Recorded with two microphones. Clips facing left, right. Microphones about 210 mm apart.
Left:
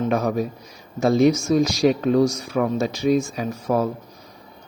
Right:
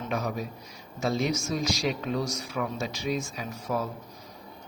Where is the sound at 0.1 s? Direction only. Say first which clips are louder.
Left 9 dB; 50° left (ahead or behind).